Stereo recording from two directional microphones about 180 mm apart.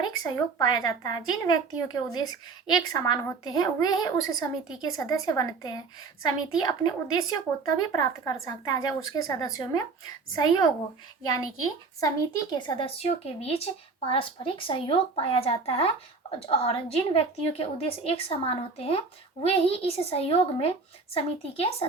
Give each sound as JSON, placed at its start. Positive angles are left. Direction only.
{"t": 0.0, "sound": "a woman's voice", "side_deg": 20}
{"t": 11.9, "sound": "speech", "side_deg": 20}